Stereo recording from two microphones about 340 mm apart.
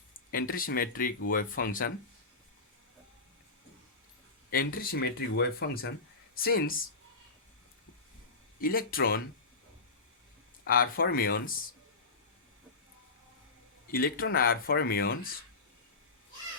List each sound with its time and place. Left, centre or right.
0.3 s speech: left
4.5 s speech: left
8.6 s speech: left
10.6 s speech: left
13.8 s speech: left